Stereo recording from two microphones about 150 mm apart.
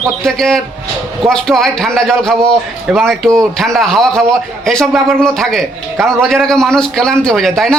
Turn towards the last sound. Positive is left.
turn(degrees=0)  # may be behind; listen again after turning